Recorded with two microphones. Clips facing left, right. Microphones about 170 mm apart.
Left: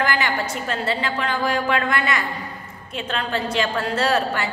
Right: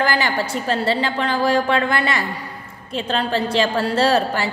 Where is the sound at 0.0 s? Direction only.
35° right (ahead or behind).